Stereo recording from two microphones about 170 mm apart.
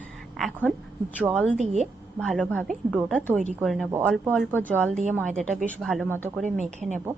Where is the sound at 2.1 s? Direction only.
Centre (ahead or behind).